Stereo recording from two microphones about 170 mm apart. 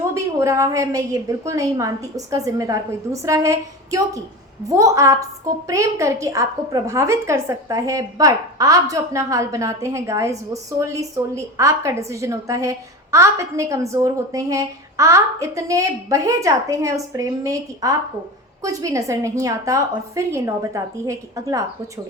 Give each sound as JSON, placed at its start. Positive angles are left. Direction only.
{"t": 0.1, "sound": "a woman's voice", "side_deg": -15}